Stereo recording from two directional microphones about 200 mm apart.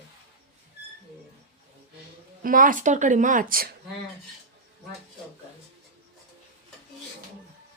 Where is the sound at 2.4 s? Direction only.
45° right (ahead or behind).